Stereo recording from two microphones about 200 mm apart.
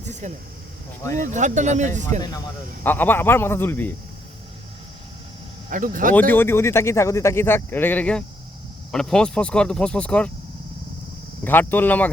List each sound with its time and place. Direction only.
0.1 s speech: 35° right (ahead or behind)
2.8 s speech: 10° left (ahead or behind)
5.7 s speech: 40° right (ahead or behind)
6.1 s speech: 10° left (ahead or behind)
11.4 s speech: 10° left (ahead or behind)